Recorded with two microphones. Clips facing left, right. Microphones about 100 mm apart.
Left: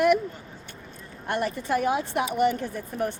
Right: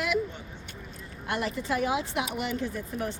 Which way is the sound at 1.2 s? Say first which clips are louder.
Left 3 dB; 45° left (ahead or behind).